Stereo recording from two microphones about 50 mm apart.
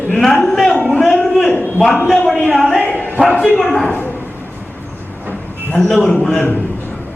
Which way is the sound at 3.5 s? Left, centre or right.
Centre.